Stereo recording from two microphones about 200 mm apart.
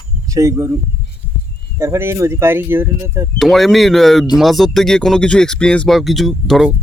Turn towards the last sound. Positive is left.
turn(degrees=0)  # may be behind; listen again after turning